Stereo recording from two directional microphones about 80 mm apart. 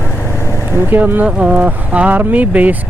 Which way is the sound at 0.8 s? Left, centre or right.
Right.